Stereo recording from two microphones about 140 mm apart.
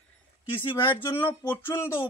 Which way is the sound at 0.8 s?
15° left (ahead or behind).